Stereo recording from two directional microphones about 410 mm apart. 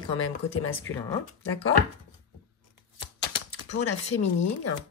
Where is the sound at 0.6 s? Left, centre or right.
Left.